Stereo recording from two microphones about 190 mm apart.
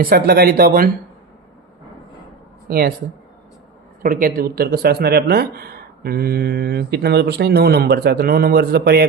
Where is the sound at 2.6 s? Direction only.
55° right (ahead or behind).